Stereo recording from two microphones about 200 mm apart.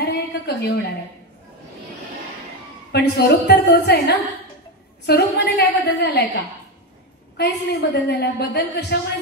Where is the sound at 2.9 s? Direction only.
55° left (ahead or behind).